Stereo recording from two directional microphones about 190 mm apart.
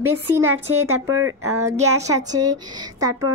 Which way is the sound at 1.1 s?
90° right.